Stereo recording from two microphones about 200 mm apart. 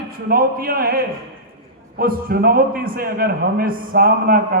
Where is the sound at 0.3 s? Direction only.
45° right (ahead or behind).